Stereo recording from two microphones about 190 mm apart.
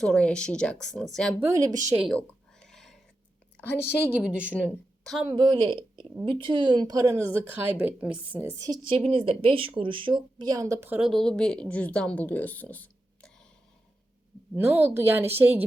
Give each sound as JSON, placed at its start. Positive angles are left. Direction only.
{"t": 0.0, "sound": "speech", "side_deg": 5}
{"t": 1.4, "sound": "a woman's voice", "side_deg": -15}
{"t": 2.0, "sound": "a sound", "side_deg": 0}
{"t": 4.2, "sound": "a woman's voice", "side_deg": -5}
{"t": 5.2, "sound": "a woman's voice", "side_deg": -20}
{"t": 8.5, "sound": "a woman's voice", "side_deg": -20}
{"t": 14.5, "sound": "a woman's voice", "side_deg": -10}